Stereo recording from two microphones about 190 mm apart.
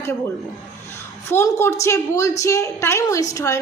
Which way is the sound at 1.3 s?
15° left (ahead or behind).